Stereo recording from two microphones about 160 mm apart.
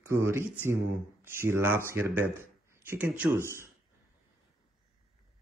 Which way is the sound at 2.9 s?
10° right (ahead or behind).